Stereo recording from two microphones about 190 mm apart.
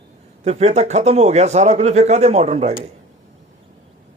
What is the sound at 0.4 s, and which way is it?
Speech, 35° right (ahead or behind).